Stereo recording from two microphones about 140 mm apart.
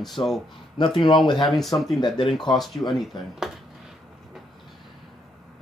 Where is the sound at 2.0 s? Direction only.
35° left (ahead or behind).